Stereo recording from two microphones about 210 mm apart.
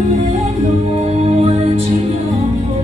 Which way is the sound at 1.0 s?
30° right (ahead or behind).